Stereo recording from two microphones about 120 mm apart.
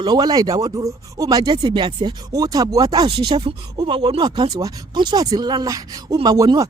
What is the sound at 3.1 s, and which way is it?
Speech, 40° right (ahead or behind).